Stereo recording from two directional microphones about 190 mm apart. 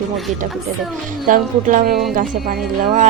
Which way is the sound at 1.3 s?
50° right (ahead or behind).